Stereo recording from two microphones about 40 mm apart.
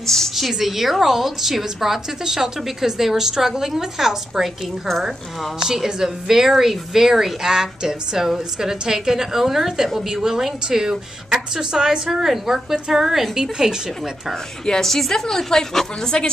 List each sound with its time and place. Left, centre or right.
0.0 s a woman's voice: centre
0.4 s a woman's voice: centre
5.7 s a woman's voice: centre
14.7 s a woman's voice: centre